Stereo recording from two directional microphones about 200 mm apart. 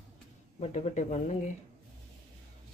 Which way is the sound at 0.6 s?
35° left (ahead or behind).